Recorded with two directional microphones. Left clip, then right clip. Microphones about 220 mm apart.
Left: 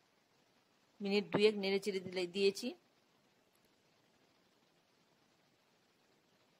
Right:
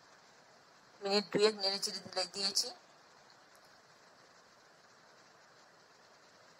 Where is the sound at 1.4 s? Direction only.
35° left (ahead or behind).